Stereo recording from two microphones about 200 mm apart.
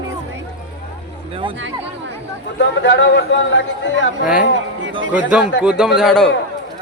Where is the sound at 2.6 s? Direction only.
65° left (ahead or behind).